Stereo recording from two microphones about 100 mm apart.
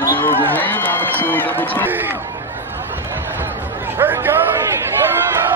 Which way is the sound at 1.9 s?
20° right (ahead or behind).